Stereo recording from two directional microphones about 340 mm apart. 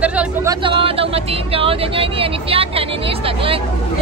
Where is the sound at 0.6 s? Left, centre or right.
Centre.